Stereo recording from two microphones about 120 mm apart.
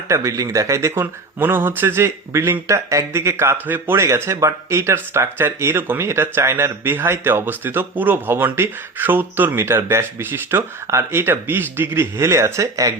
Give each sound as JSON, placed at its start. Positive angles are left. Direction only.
{"t": 0.1, "sound": "speech", "side_deg": -25}